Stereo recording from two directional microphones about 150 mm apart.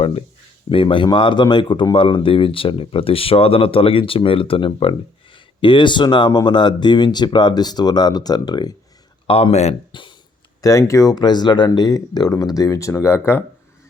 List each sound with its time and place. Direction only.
0.0 s speech: 40° left (ahead or behind)
9.2 s speech: 40° left (ahead or behind)
10.6 s speech: 20° left (ahead or behind)